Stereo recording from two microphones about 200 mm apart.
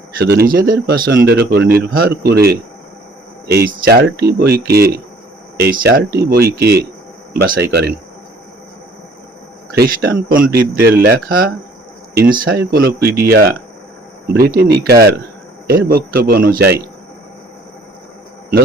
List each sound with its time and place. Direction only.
0.2 s speech: 50° right (ahead or behind)
9.7 s speech: 55° right (ahead or behind)